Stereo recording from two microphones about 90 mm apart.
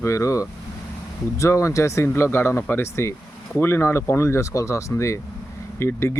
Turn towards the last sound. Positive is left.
turn(degrees=30)  # may be behind; listen again after turning